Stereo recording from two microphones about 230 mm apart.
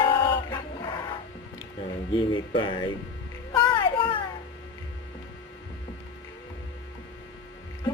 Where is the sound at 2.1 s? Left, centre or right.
Left.